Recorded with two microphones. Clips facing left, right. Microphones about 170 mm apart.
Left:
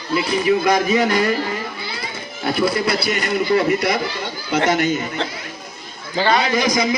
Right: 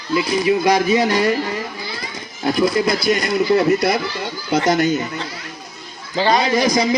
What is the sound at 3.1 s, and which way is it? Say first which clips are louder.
A man's voice: right 3 dB; 35° right (ahead or behind).